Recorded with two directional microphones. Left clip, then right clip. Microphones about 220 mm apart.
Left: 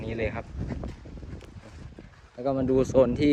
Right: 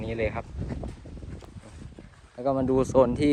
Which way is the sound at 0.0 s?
10° right (ahead or behind).